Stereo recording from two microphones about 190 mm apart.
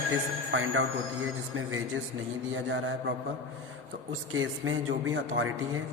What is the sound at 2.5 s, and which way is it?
Mantra, 90° right.